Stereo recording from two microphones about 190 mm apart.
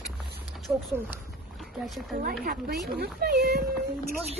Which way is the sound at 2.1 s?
50° right (ahead or behind).